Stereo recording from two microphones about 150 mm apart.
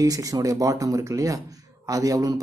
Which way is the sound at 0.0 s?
25° right (ahead or behind).